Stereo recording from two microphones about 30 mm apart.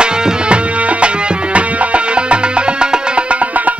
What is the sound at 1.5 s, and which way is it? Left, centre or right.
Music, right.